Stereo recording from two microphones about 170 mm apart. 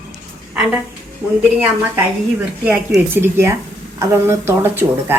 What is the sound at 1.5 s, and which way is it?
A woman's voice, 10° right (ahead or behind).